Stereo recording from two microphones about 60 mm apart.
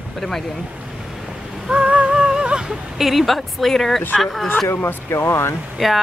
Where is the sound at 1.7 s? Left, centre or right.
Centre.